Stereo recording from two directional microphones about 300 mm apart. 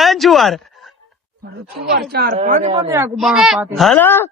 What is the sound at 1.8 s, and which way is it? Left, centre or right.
A woman's voice, right.